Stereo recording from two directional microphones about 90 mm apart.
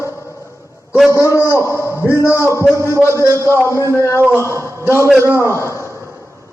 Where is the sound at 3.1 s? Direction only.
35° right (ahead or behind).